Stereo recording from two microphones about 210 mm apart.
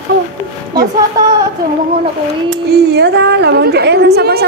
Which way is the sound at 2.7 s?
50° right (ahead or behind).